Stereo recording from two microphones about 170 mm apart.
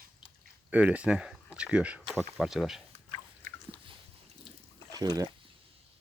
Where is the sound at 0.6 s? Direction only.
10° right (ahead or behind).